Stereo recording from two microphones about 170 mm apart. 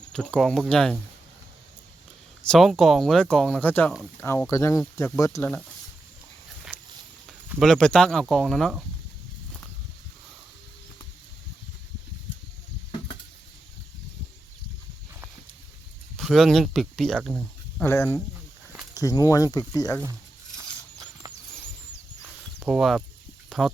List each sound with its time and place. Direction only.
0.1 s speech: 5° left (ahead or behind)
2.4 s speech: centre (ahead or behind); by 5.5 s 15° left (ahead or behind)
7.3 s speech: centre (ahead or behind)
16.1 s speech: centre (ahead or behind)
17.8 s speech: 15° left (ahead or behind)
20.6 s a sound: 25° right (ahead or behind)
22.6 s speech: centre (ahead or behind)